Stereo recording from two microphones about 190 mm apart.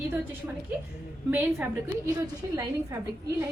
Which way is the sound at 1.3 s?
10° right (ahead or behind).